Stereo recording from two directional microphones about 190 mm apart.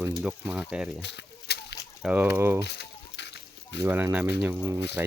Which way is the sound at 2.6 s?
60° left (ahead or behind).